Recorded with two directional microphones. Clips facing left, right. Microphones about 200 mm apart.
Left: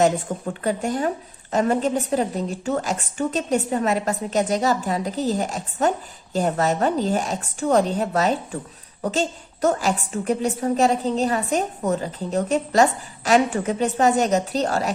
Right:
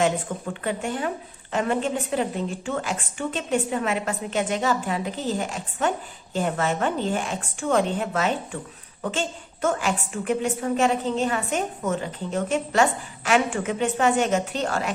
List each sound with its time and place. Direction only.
0.0 s a woman's voice: 40° left (ahead or behind)